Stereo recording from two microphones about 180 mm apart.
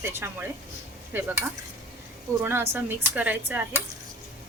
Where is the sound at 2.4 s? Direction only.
10° right (ahead or behind).